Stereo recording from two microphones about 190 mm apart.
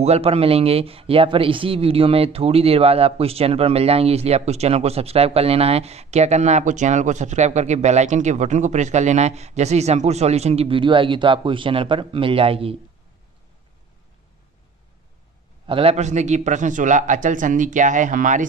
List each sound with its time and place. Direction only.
0.0 s speech: 35° right (ahead or behind)
15.6 s speech: 30° right (ahead or behind)